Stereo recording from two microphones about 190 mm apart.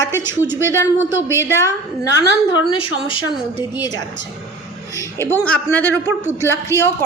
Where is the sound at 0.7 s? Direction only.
15° left (ahead or behind).